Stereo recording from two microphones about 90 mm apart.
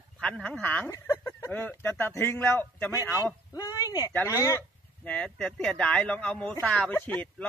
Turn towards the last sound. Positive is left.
turn(degrees=20)  # may be behind; listen again after turning